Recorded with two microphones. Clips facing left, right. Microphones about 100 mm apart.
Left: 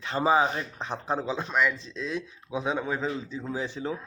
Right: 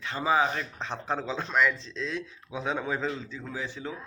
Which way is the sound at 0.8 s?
15° left (ahead or behind).